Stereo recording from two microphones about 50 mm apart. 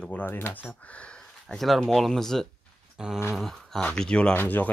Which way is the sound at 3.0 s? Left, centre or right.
Centre.